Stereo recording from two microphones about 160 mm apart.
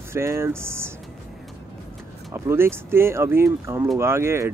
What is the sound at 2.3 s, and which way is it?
Speech, 15° right (ahead or behind).